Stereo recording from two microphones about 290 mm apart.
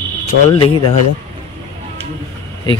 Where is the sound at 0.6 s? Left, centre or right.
Centre.